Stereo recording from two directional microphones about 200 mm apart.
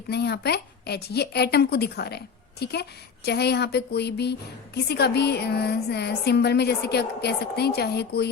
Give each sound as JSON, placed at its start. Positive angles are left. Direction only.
{"t": 0.1, "sound": "a woman's voice", "side_deg": 55}